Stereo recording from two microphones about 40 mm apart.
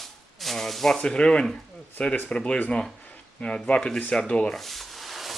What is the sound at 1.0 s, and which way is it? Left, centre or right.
Speech, left.